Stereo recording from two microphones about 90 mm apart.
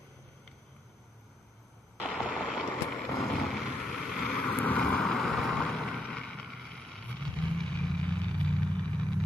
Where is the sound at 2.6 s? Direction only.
Centre (ahead or behind).